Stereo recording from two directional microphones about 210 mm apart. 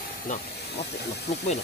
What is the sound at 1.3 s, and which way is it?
Speech, 35° left (ahead or behind).